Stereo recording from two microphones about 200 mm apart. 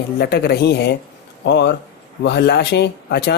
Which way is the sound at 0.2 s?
55° left (ahead or behind).